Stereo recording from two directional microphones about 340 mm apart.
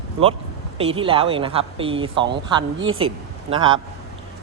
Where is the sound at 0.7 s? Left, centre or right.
Centre.